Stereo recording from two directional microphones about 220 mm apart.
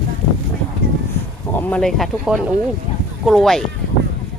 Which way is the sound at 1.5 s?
5° left (ahead or behind).